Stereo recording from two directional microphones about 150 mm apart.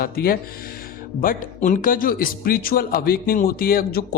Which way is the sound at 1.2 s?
70° left (ahead or behind).